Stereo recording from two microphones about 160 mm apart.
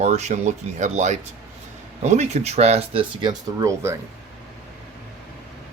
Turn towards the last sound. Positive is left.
turn(degrees=-20)  # may be behind; listen again after turning